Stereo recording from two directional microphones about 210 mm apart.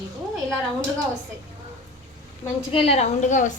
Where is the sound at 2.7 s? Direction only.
30° left (ahead or behind).